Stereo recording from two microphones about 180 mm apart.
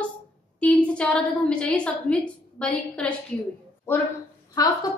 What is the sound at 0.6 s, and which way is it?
A woman's voice, 5° left (ahead or behind).